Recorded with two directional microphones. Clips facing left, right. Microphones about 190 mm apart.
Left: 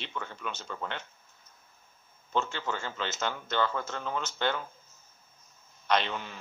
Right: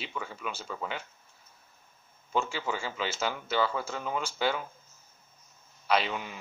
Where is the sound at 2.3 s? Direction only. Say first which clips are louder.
Right 1 dB; 10° right (ahead or behind).